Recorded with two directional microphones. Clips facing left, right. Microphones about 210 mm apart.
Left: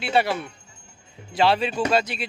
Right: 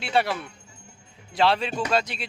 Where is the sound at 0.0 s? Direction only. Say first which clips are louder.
Left 2 dB; centre (ahead or behind).